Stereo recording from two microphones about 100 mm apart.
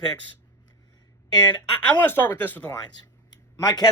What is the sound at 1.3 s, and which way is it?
Speech, 40° left (ahead or behind).